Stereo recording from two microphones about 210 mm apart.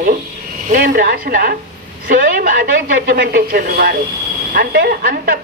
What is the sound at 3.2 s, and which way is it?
Speech, 45° right (ahead or behind).